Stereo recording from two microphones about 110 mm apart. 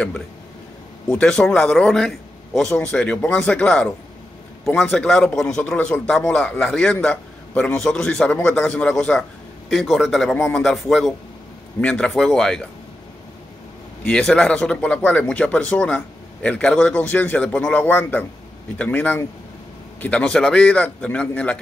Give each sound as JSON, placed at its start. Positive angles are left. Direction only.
{"t": 1.0, "sound": "a man's voice", "side_deg": 5}
{"t": 4.9, "sound": "a man's voice", "side_deg": 5}
{"t": 14.0, "sound": "a man's voice", "side_deg": 10}